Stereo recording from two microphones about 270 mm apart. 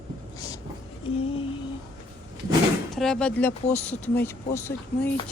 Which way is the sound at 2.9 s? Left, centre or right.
Centre.